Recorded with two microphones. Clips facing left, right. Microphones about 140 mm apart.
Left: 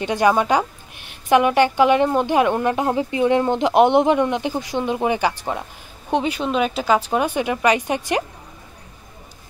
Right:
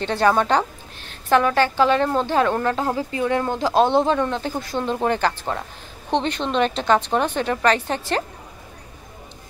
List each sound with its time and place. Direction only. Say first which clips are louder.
0.0 s a woman's voice: left 1 dB; 15° left (ahead or behind)